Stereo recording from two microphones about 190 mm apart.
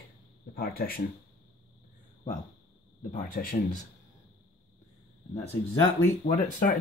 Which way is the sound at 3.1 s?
45° left (ahead or behind).